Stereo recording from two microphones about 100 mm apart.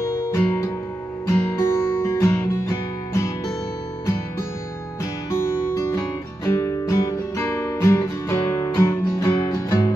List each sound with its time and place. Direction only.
0.0 s music: 30° left (ahead or behind)
5.3 s music: 30° left (ahead or behind)